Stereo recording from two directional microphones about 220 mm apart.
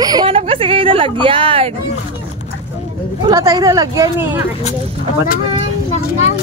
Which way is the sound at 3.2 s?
15° right (ahead or behind).